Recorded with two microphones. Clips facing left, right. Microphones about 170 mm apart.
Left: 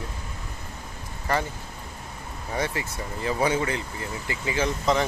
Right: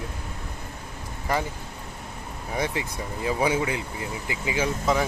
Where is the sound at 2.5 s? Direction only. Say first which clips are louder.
Right 1 dB; 15° right (ahead or behind).